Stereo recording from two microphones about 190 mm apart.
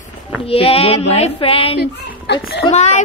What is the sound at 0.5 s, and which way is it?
Child singing, 30° left (ahead or behind).